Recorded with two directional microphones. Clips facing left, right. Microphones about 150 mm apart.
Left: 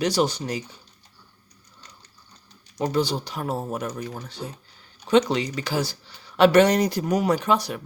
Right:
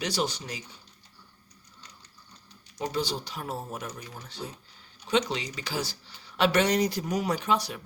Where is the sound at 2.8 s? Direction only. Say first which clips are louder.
Left 7 dB; 55° left (ahead or behind).